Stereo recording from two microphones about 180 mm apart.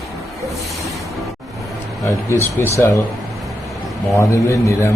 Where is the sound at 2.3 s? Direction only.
15° left (ahead or behind).